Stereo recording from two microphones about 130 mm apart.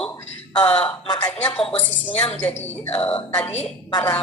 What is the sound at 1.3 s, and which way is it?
Speech, 10° left (ahead or behind).